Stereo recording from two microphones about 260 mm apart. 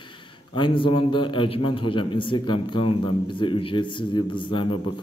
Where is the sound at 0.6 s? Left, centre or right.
Centre.